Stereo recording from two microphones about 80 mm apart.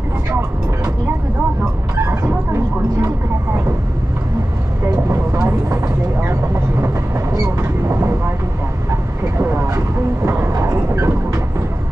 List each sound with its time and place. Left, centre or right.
2.0 s a sound: right
4.9 s vehicle: right
6.2 s speech: right
7.4 s vehicle: right
9.4 s vehicle: right